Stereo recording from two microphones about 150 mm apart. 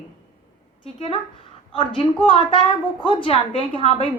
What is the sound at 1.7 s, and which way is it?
A woman's voice, 35° left (ahead or behind).